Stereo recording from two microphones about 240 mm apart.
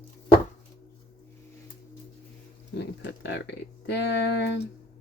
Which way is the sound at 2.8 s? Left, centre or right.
Left.